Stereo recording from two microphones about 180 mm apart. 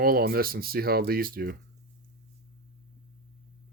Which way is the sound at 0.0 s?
55° right (ahead or behind).